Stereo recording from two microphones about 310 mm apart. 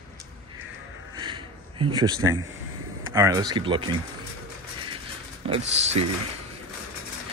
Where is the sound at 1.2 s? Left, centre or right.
Centre.